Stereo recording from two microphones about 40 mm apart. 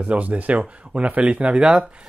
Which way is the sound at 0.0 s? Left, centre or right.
Right.